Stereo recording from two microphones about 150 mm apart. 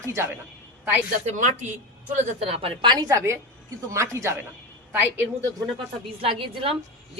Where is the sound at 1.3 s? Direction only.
55° right (ahead or behind).